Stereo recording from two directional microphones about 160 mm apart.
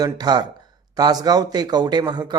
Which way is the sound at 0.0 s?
25° right (ahead or behind).